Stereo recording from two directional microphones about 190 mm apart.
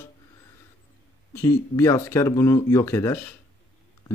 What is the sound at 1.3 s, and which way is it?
Speech, 15° left (ahead or behind).